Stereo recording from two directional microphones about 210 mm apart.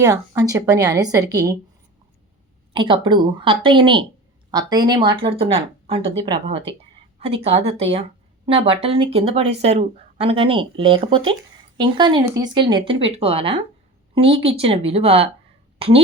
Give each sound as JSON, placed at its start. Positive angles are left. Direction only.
{"t": 0.0, "sound": "a woman's voice", "side_deg": -15}
{"t": 2.7, "sound": "speech", "side_deg": -25}